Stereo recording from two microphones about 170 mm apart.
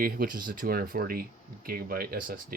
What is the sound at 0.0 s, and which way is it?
Speech, 55° right (ahead or behind).